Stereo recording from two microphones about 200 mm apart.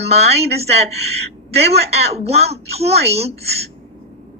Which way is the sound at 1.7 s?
30° right (ahead or behind).